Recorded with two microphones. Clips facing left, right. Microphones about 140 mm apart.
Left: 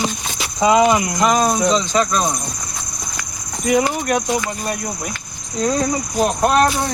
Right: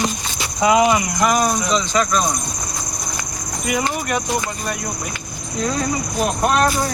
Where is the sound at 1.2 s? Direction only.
25° left (ahead or behind).